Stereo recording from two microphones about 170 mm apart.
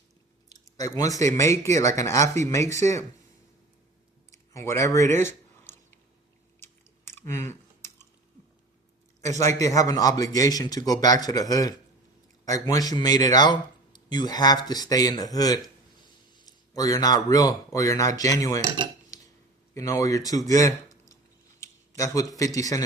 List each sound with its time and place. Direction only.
0.8 s speech: 20° left (ahead or behind)
4.3 s speech: 15° left (ahead or behind)
6.6 s chewing: 15° left (ahead or behind)
9.6 s speech: 20° left (ahead or behind)
19.7 s speech: 20° left (ahead or behind)
21.6 s a sound: 15° left (ahead or behind)
22.5 s speech: 20° left (ahead or behind)